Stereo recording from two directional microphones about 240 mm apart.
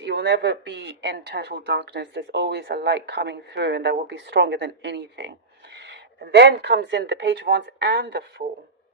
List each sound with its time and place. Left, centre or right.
0.0 s speech: right